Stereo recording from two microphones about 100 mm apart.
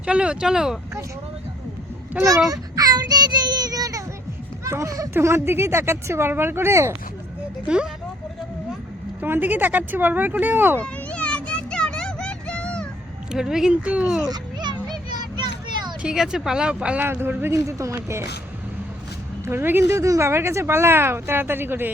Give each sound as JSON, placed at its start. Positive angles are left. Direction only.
{"t": 0.0, "sound": "speech", "side_deg": -10}
{"t": 2.5, "sound": "child singing", "side_deg": -40}
{"t": 4.6, "sound": "speech", "side_deg": -30}
{"t": 9.2, "sound": "speech", "side_deg": -20}
{"t": 10.8, "sound": "children playing", "side_deg": 15}
{"t": 13.3, "sound": "speech", "side_deg": -5}
{"t": 14.3, "sound": "children playing", "side_deg": -45}
{"t": 16.0, "sound": "speech", "side_deg": -5}
{"t": 17.1, "sound": "speech", "side_deg": -20}
{"t": 19.5, "sound": "speech", "side_deg": -20}